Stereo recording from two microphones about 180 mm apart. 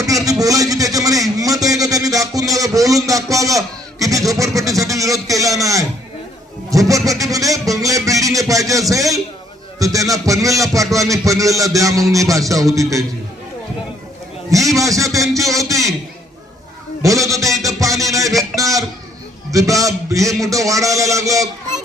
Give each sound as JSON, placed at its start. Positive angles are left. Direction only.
{"t": 0.0, "sound": "a sound", "side_deg": -20}
{"t": 6.7, "sound": "speech", "side_deg": -20}
{"t": 14.5, "sound": "speech", "side_deg": -20}
{"t": 17.0, "sound": "music", "side_deg": -15}
{"t": 19.5, "sound": "speech", "side_deg": -20}